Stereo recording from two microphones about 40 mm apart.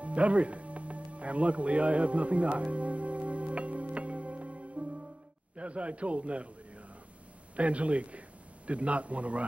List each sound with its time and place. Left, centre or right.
0.0 s music: right
5.6 s a man's voice: right
7.5 s a man's voice: right